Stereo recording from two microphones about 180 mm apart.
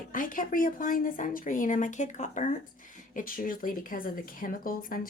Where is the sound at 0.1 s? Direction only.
50° left (ahead or behind).